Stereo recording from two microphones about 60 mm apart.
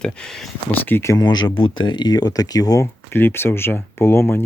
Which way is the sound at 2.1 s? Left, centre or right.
Left.